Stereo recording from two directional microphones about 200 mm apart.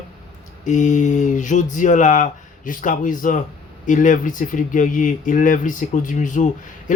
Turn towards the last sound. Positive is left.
turn(degrees=40)  # may be behind; listen again after turning